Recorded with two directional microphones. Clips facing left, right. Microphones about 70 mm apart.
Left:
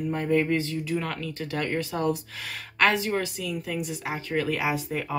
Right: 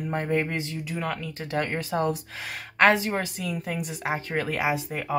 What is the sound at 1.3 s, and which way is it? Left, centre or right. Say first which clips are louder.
A woman's voice: right 1 dB; right.